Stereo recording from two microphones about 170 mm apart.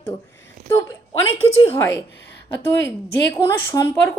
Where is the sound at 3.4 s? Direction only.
15° left (ahead or behind).